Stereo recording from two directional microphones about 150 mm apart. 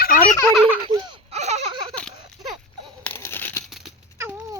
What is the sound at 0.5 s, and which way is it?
Baby laughter, 10° right (ahead or behind).